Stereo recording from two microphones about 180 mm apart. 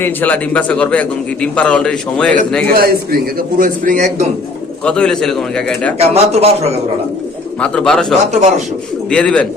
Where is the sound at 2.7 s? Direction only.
55° right (ahead or behind).